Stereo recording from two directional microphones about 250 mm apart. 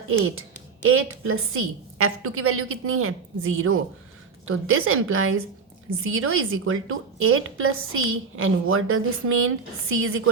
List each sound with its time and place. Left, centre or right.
0.1 s a woman's voice: right